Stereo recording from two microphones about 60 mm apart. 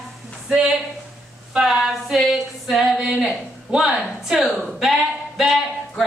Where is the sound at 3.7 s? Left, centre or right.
Centre.